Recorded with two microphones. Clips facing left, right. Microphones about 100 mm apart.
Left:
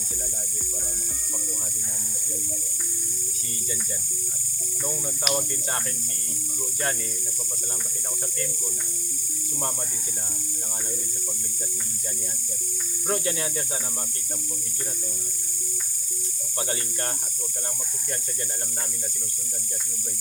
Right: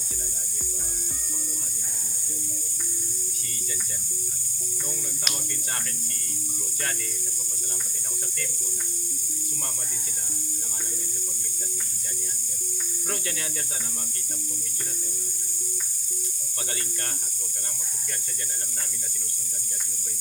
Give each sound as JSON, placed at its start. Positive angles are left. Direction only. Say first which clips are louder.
{"t": 13.1, "sound": "speech", "louder": "left 7 dB", "side_deg": 25}
{"t": 16.6, "sound": "speech", "louder": "left 5 dB", "side_deg": 25}